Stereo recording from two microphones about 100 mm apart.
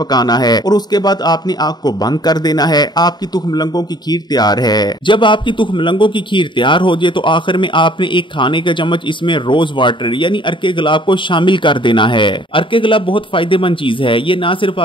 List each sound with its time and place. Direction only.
0.1 s a man's voice: 45° left (ahead or behind); by 14.7 s 60° left (ahead or behind)